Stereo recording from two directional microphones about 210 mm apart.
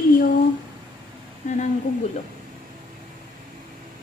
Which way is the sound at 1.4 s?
40° left (ahead or behind).